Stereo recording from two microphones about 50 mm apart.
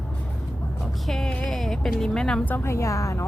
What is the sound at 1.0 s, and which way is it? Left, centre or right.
Speech, centre.